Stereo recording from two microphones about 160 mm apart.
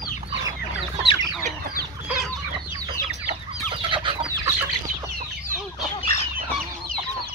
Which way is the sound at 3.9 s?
30° right (ahead or behind).